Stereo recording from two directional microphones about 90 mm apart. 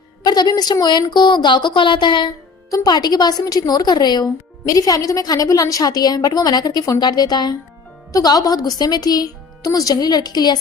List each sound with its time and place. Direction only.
0.3 s speech: 50° left (ahead or behind)
2.6 s speech: 45° left (ahead or behind)